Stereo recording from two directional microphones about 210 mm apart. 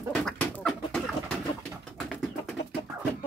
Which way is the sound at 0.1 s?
Centre (ahead or behind).